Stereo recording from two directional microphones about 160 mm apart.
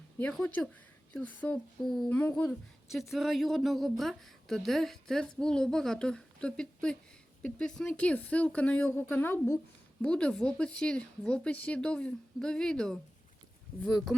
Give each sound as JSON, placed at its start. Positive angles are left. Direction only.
{"t": 0.2, "sound": "speech", "side_deg": 5}
{"t": 2.5, "sound": "speech", "side_deg": 0}